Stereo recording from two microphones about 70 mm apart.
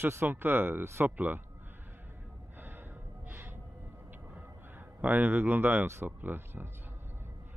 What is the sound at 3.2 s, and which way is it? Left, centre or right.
Music, right.